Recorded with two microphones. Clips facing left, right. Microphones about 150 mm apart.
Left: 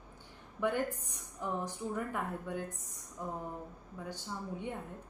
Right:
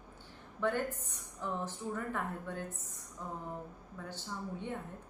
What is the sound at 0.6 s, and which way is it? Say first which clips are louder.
A woman's voice: left 1 dB; 10° left (ahead or behind).